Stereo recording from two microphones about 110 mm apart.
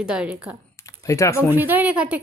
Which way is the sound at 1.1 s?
30° left (ahead or behind).